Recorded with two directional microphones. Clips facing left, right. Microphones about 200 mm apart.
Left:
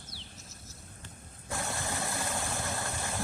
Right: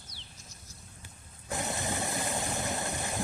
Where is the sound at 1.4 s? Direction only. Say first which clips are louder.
Right 2 dB; 20° right (ahead or behind).